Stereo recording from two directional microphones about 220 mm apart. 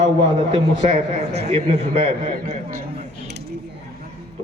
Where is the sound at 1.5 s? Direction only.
30° right (ahead or behind).